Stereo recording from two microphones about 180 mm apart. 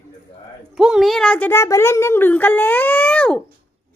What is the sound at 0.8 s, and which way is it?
Speech, centre (ahead or behind).